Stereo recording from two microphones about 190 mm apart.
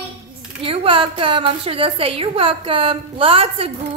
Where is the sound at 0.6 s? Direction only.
30° right (ahead or behind).